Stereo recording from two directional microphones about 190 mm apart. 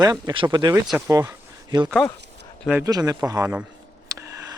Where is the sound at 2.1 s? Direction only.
65° right (ahead or behind).